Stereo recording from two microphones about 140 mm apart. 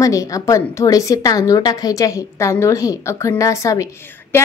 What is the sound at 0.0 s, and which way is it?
Speech, 25° left (ahead or behind).